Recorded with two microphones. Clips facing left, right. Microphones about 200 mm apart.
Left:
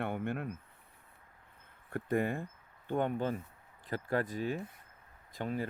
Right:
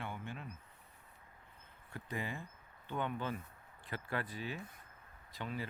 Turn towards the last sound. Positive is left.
turn(degrees=50)  # may be behind; listen again after turning